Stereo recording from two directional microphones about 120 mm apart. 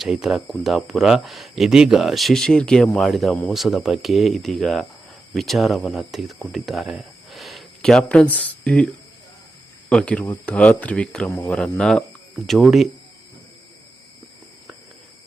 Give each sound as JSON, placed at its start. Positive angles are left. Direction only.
{"t": 0.0, "sound": "speech", "side_deg": -5}
{"t": 9.9, "sound": "speech", "side_deg": 10}
{"t": 11.3, "sound": "speech", "side_deg": 20}
{"t": 11.5, "sound": "speech", "side_deg": 5}